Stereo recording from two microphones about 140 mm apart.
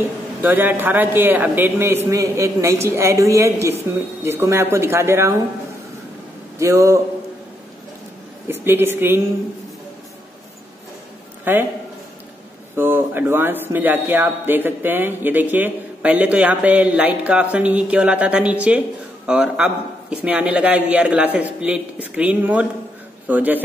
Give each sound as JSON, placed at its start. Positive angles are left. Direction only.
{"t": 0.4, "sound": "a man's voice", "side_deg": -15}
{"t": 6.6, "sound": "a man's voice", "side_deg": -20}
{"t": 8.5, "sound": "speech", "side_deg": -15}
{"t": 11.5, "sound": "speech", "side_deg": -15}
{"t": 12.7, "sound": "speech", "side_deg": -15}